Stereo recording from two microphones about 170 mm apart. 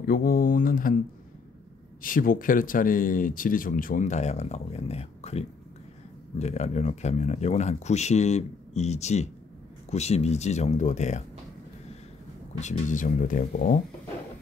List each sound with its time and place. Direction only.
0.0 s speech: 55° left (ahead or behind)
2.0 s speech: 55° left (ahead or behind)
12.5 s speech: 45° left (ahead or behind)